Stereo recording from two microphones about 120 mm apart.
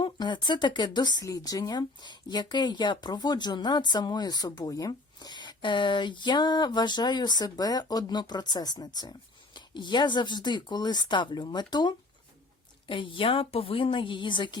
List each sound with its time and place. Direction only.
0.0 s a woman's voice: 40° left (ahead or behind)